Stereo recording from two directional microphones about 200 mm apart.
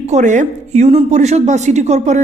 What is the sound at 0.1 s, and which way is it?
Speech, 35° right (ahead or behind).